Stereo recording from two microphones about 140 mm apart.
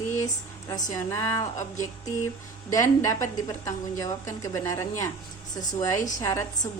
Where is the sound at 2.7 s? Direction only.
25° left (ahead or behind).